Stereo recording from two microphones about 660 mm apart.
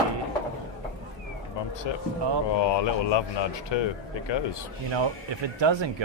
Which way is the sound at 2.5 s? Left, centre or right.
Left.